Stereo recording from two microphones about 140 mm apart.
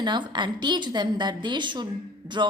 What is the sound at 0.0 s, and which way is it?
A woman's voice, 30° right (ahead or behind).